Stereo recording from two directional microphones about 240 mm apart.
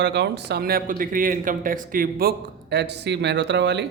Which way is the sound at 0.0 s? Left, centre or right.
Right.